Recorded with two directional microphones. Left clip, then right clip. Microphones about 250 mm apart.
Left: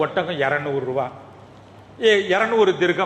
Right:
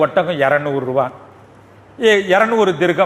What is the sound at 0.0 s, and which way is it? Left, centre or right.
A man's voice, right.